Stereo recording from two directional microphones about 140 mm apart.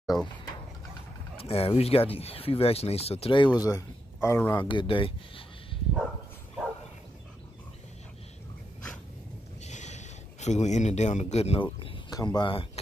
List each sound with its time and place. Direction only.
0.0 s speech: centre (ahead or behind)
1.4 s speech: 45° left (ahead or behind); by 4.6 s 20° left (ahead or behind)
4.6 s speech: 35° left (ahead or behind)
9.6 s a sound: 55° left (ahead or behind)
12.1 s speech: 30° left (ahead or behind)